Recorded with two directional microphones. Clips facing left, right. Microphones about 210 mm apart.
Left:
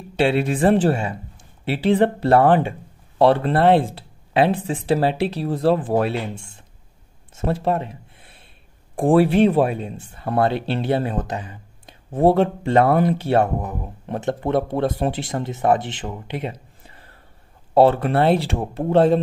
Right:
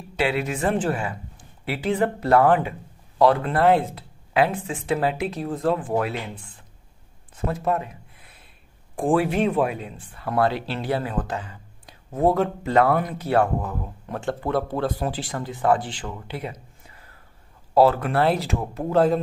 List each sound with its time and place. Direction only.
0.1 s speech: 30° left (ahead or behind)
12.1 s speech: 30° left (ahead or behind)
16.8 s gasp: 30° left (ahead or behind)
17.7 s speech: 25° left (ahead or behind)